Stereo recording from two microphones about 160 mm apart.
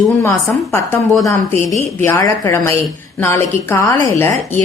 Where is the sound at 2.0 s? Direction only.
15° left (ahead or behind).